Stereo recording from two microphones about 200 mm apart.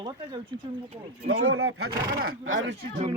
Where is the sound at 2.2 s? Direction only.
85° right.